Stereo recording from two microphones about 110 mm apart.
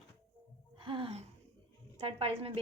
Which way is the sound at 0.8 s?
50° right (ahead or behind).